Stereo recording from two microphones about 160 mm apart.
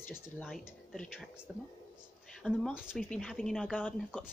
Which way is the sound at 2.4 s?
Centre (ahead or behind).